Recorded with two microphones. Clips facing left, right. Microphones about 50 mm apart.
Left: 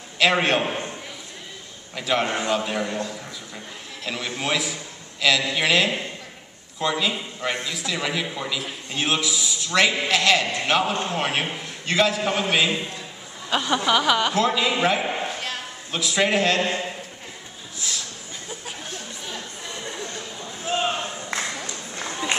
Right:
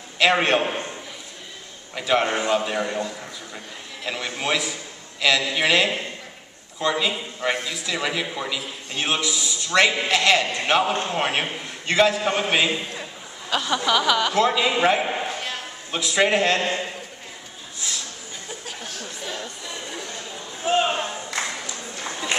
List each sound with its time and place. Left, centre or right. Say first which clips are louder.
0.2 s a man's voice: right 1 dB; centre
2.0 s a man's voice: right 2 dB; centre
2.6 s a man's voice: right 1 dB; centre
13.5 s speech: left 1 dB; centre
14.3 s a man's voice: right 1 dB; centre
18.7 s a sound: even; centre
20.6 s a sound: right 4 dB; right